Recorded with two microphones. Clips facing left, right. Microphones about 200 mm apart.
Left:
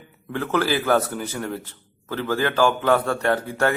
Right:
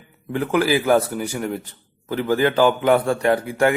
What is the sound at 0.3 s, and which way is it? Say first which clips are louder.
Speech: right 3 dB; 15° right (ahead or behind).